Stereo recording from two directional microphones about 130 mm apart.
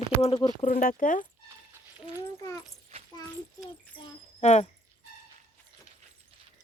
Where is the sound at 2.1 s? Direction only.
25° left (ahead or behind).